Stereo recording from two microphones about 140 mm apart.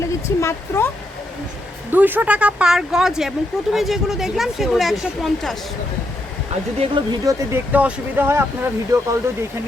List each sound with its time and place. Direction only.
0.0 s speech: 20° left (ahead or behind)
1.9 s speech: 15° right (ahead or behind)
6.7 s speech: 45° right (ahead or behind)
7.1 s speech: 25° right (ahead or behind)
7.7 s speech: 10° right (ahead or behind)